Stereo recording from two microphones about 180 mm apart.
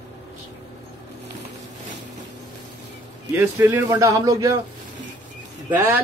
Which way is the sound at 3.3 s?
10° right (ahead or behind).